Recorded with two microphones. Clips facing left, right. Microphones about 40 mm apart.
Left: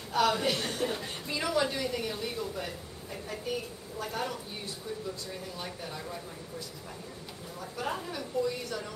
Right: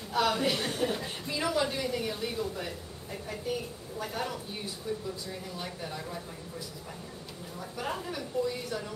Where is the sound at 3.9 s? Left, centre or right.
Centre.